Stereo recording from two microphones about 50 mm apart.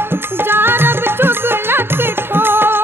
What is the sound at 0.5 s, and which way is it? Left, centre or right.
Music, right.